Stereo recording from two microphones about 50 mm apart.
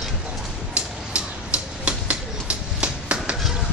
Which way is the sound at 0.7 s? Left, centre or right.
Right.